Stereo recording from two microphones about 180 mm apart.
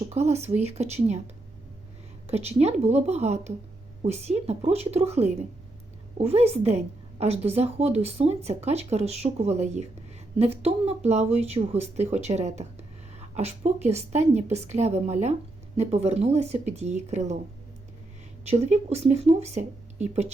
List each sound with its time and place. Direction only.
0.1 s speech: 35° right (ahead or behind)
2.2 s speech: 35° right (ahead or behind)
18.4 s speech: 35° right (ahead or behind)